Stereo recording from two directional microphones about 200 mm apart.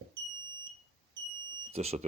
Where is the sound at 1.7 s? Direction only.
30° right (ahead or behind).